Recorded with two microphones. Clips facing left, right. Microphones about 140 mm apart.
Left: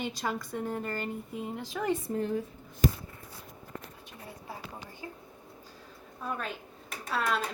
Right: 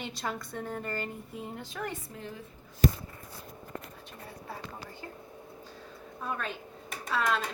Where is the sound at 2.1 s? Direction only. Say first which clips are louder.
Left 12 dB; 50° left (ahead or behind).